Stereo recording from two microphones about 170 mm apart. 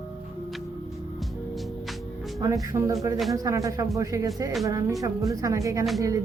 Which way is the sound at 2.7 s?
15° right (ahead or behind).